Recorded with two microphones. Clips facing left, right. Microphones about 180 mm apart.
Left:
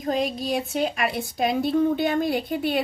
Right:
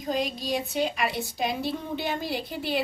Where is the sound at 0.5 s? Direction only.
50° left (ahead or behind).